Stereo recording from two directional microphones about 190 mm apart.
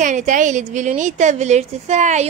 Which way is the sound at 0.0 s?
40° right (ahead or behind).